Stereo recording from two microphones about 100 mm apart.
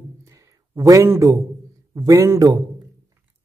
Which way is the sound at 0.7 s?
35° right (ahead or behind).